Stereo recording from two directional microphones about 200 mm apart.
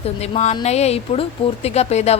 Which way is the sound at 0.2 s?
35° left (ahead or behind).